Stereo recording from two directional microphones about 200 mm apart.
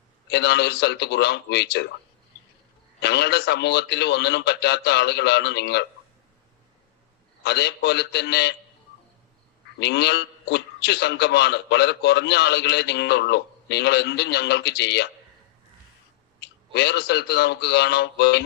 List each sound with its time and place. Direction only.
0.3 s a man's voice: 55° left (ahead or behind)
3.0 s a man's voice: 55° left (ahead or behind)
7.4 s a man's voice: 55° left (ahead or behind)
9.8 s a man's voice: 55° left (ahead or behind)
16.7 s a man's voice: 55° left (ahead or behind)